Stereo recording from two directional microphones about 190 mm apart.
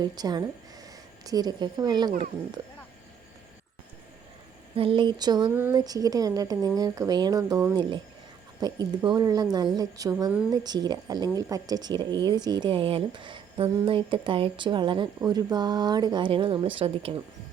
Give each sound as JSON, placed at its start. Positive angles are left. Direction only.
{"t": 0.0, "sound": "speech", "side_deg": -20}
{"t": 4.7, "sound": "speech", "side_deg": -30}